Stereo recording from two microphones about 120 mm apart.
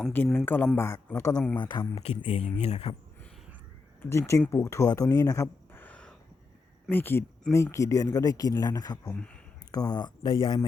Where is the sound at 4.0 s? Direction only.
20° left (ahead or behind).